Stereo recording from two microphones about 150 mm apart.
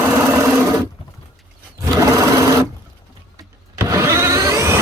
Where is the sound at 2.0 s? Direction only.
20° right (ahead or behind).